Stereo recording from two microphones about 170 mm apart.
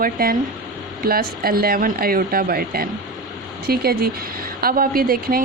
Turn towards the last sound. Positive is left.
turn(degrees=-60)  # may be behind; listen again after turning